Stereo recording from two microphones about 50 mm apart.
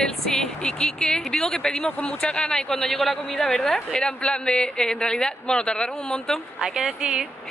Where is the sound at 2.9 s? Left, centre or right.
Centre.